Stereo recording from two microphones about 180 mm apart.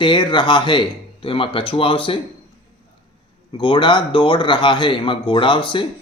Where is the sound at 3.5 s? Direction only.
25° left (ahead or behind).